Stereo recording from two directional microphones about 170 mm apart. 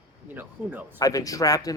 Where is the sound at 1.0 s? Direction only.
20° left (ahead or behind).